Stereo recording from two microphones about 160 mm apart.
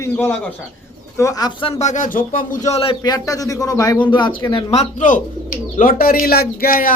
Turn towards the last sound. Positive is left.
turn(degrees=65)  # may be behind; listen again after turning